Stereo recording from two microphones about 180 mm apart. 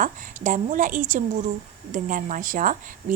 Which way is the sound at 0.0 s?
45° right (ahead or behind).